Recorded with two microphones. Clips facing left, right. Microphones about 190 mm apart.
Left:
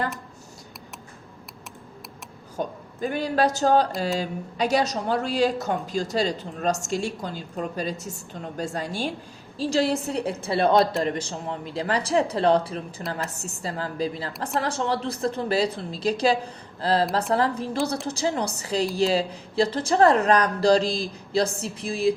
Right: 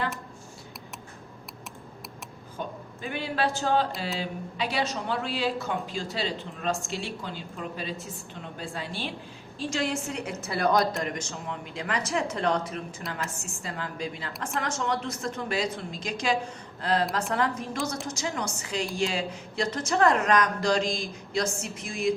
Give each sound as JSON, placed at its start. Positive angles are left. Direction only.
{"t": 2.6, "sound": "a woman's voice", "side_deg": 40}